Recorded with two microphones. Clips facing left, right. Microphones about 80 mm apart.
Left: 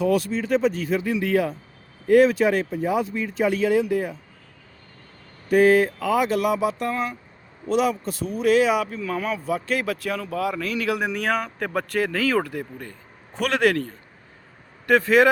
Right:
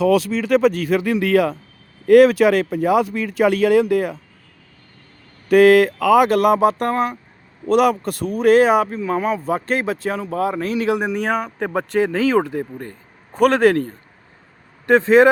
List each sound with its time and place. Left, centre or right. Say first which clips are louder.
0.0 s speech: right 5 dB; right
5.5 s speech: right 5 dB; right
9.0 s speech: right 6 dB; right
9.5 s a man's voice: right 4 dB; right
9.8 s speech: right 4 dB; right
13.3 s a man's voice: right 7 dB; right